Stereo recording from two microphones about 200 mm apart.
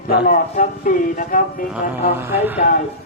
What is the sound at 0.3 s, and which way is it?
Speech, 40° left (ahead or behind).